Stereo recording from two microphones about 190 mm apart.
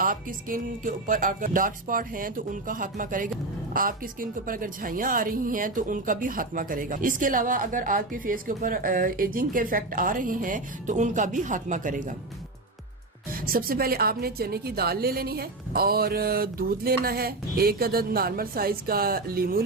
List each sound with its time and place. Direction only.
0.0 s a woman's voice: 45° right (ahead or behind)
13.3 s a woman's voice: 50° right (ahead or behind)